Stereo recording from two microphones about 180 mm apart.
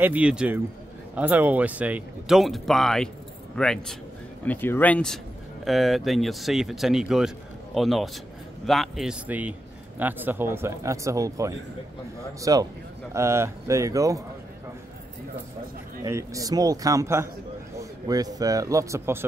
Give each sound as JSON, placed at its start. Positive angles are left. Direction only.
{"t": 0.0, "sound": "a man's voice", "side_deg": -10}
{"t": 16.0, "sound": "a man's voice", "side_deg": -20}